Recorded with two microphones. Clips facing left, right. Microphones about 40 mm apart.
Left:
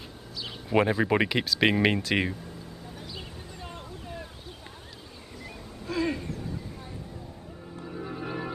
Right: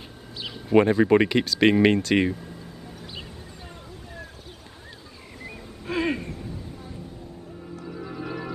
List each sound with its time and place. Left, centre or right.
0.7 s speech: centre
5.4 s a sound: right
7.8 s music: centre